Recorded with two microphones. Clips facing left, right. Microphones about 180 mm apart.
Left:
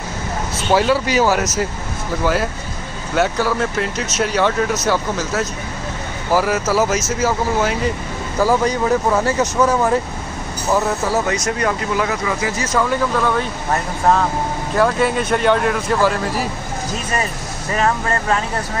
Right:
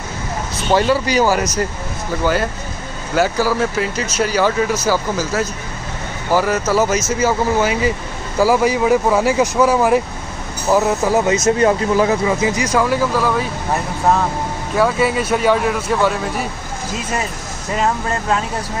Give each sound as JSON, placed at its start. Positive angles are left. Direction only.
{"t": 0.7, "sound": "speech", "side_deg": 0}
{"t": 14.8, "sound": "speech", "side_deg": -5}